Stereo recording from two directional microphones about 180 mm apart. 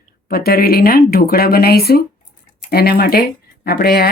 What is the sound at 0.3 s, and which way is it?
Speech, 60° left (ahead or behind).